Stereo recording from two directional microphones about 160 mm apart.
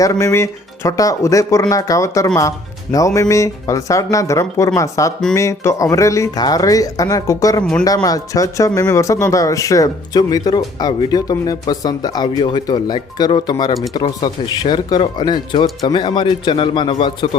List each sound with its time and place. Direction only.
0.0 s speech: 20° left (ahead or behind)
7.6 s speech: 5° left (ahead or behind)
8.0 s speech: 20° left (ahead or behind)